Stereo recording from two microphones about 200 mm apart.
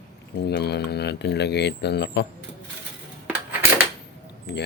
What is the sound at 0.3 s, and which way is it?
Speech, 55° left (ahead or behind).